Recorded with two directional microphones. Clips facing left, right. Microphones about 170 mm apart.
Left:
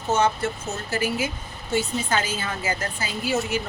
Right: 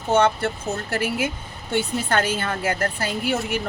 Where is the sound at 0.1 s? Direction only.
60° right (ahead or behind).